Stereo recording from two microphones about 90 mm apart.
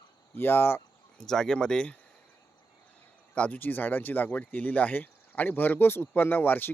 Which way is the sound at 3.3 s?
15° left (ahead or behind).